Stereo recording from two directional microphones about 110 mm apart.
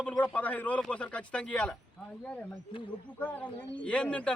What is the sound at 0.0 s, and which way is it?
Speech, 15° left (ahead or behind).